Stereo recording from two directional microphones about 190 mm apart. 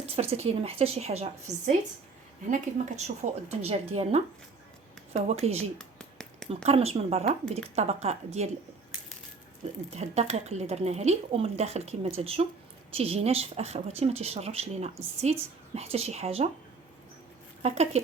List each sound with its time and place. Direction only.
0.0 s a woman's voice: 35° right (ahead or behind)
5.7 s a sound: 5° left (ahead or behind)
6.7 s a woman's voice: 30° right (ahead or behind)
9.9 s a woman's voice: 35° right (ahead or behind)
17.6 s a woman's voice: 35° right (ahead or behind)